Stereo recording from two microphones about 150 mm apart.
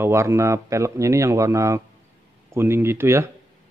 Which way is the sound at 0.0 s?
20° right (ahead or behind).